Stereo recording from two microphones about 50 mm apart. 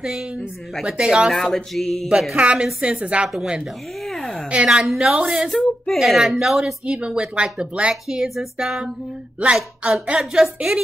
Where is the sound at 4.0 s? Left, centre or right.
Centre.